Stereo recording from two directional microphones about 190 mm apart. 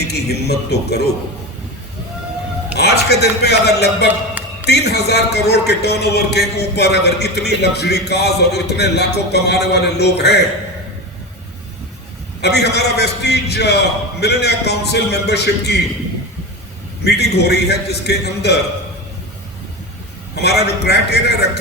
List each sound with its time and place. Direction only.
0.0 s a man's voice: 60° left (ahead or behind)
2.7 s a man's voice: 60° left (ahead or behind)
12.4 s a man's voice: 60° left (ahead or behind)
17.0 s a man's voice: 60° left (ahead or behind)
20.3 s a man's voice: 60° left (ahead or behind)